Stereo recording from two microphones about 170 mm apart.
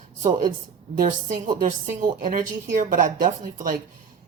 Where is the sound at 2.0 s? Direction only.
55° right (ahead or behind).